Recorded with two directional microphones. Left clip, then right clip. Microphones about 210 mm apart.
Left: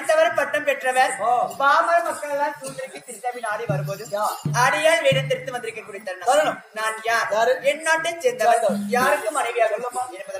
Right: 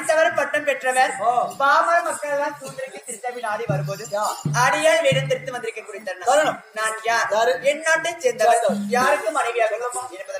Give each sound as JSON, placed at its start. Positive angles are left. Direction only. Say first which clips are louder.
{"t": 0.1, "sound": "a woman's voice", "louder": "even", "side_deg": 0}
{"t": 6.2, "sound": "a man's voice", "louder": "right 1 dB", "side_deg": -20}
{"t": 6.7, "sound": "speech", "louder": "right 1 dB", "side_deg": 0}
{"t": 7.3, "sound": "a man's voice", "louder": "right 1 dB", "side_deg": -20}
{"t": 7.6, "sound": "speech", "louder": "right 1 dB", "side_deg": 0}